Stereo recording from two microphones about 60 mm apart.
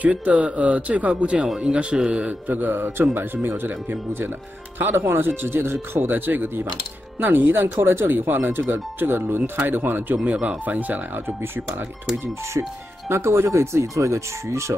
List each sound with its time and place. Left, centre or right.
0.0 s a man's voice: right
4.7 s speech: right
10.2 s speech: centre
10.6 s a man's voice: right
13.1 s speech: right
13.6 s speech: right